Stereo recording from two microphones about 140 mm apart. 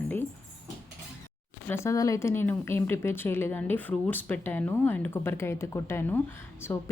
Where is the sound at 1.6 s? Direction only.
20° left (ahead or behind).